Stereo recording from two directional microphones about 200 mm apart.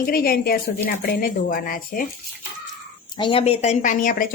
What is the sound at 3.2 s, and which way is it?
Speech, 25° left (ahead or behind).